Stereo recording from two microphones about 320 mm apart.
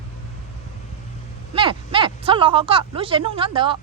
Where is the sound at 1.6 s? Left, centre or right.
Centre.